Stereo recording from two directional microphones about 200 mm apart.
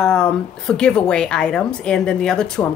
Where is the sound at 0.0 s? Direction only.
5° left (ahead or behind).